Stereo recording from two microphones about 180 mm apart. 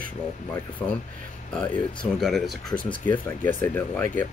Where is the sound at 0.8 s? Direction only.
5° left (ahead or behind).